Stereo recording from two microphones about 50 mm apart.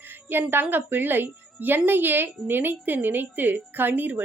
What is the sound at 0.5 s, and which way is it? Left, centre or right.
A woman's voice, right.